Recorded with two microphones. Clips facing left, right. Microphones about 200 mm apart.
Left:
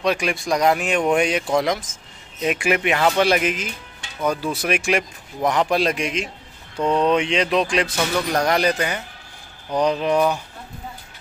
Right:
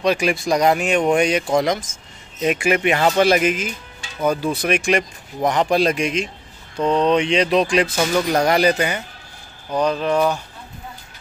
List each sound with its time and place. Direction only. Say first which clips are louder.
0.0 s speech: right 3 dB; centre (ahead or behind)
9.8 s speech: even; 15° left (ahead or behind)